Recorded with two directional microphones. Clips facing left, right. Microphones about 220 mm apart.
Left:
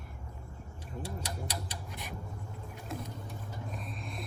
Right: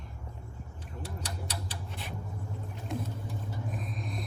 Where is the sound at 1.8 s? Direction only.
15° left (ahead or behind).